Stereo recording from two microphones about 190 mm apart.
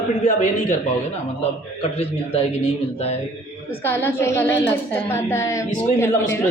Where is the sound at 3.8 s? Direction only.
10° left (ahead or behind).